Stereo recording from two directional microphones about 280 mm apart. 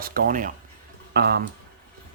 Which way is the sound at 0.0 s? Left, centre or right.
Right.